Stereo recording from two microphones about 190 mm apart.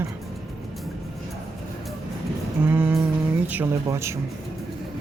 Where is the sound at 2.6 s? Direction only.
10° right (ahead or behind).